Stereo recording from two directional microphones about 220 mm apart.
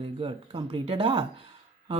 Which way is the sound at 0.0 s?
25° right (ahead or behind).